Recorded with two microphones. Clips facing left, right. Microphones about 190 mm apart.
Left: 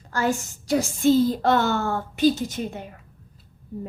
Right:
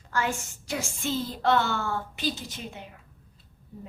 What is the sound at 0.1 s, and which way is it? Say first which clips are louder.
A child's voice: left 5 dB; 40° left (ahead or behind).